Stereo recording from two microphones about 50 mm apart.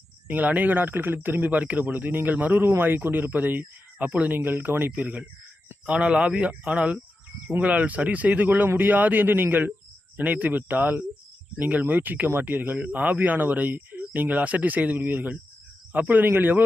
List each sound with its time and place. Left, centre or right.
0.3 s speech: right
4.4 s speech: right
5.8 s speech: right